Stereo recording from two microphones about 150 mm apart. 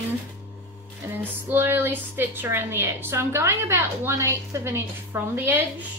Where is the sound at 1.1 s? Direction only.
15° right (ahead or behind).